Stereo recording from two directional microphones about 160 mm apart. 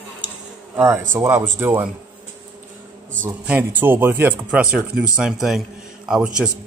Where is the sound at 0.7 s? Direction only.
15° right (ahead or behind).